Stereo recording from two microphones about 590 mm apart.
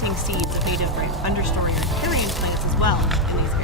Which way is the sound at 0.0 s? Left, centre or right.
Centre.